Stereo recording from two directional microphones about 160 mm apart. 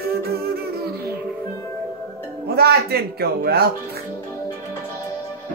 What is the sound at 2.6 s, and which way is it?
A man's voice, 80° right.